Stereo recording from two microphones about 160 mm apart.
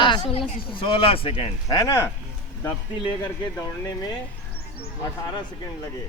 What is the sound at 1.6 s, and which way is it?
Speech, 20° left (ahead or behind).